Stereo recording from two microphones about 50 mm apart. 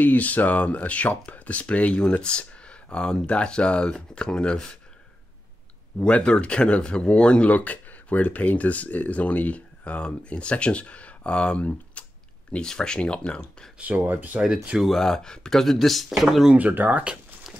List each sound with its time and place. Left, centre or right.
0.0 s speech: left; by 4.7 s centre
5.9 s speech: left
7.5 s speech: left
13.7 s speech: right
14.4 s speech: centre
14.8 s speech: centre
15.6 s speech: centre
16.5 s speech: right